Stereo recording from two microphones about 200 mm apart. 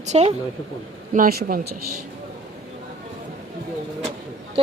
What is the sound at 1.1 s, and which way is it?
Speech, 45° right (ahead or behind).